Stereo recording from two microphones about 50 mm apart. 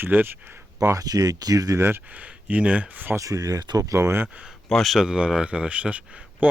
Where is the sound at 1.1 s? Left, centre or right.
Right.